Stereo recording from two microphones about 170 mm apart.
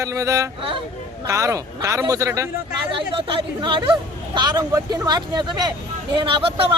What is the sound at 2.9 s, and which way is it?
Speech, 30° right (ahead or behind).